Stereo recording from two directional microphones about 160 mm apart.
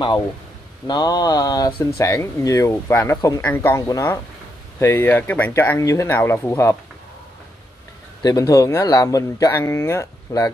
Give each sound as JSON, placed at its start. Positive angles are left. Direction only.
{"t": 0.8, "sound": "speech", "side_deg": 25}
{"t": 8.2, "sound": "speech", "side_deg": 25}